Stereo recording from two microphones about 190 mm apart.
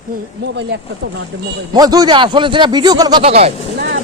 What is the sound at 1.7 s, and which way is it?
A man's voice, 20° right (ahead or behind).